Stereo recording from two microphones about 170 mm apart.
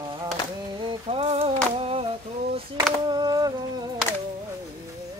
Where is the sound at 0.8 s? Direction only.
35° right (ahead or behind).